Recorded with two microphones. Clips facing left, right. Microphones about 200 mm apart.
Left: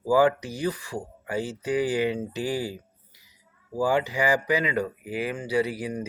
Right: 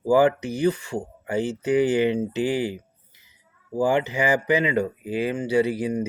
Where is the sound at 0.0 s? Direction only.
25° right (ahead or behind).